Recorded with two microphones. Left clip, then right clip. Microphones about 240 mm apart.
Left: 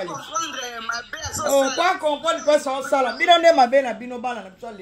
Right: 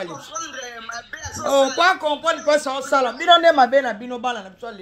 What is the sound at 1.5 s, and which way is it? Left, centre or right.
A man's voice, right.